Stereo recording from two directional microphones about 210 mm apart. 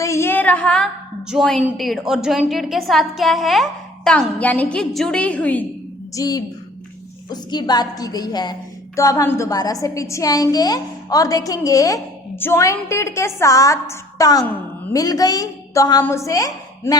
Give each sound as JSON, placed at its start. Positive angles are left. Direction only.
{"t": 0.0, "sound": "a woman's voice", "side_deg": 10}
{"t": 6.1, "sound": "a woman's voice", "side_deg": 20}